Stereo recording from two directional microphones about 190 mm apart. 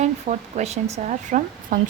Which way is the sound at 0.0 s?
35° right (ahead or behind).